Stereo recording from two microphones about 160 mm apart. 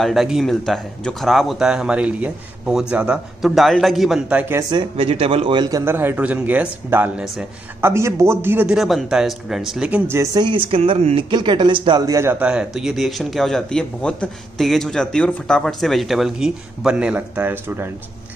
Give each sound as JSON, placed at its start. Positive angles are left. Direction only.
{"t": 0.0, "sound": "a man's voice", "side_deg": 0}
{"t": 4.6, "sound": "a man's voice", "side_deg": -25}
{"t": 12.2, "sound": "a man's voice", "side_deg": -10}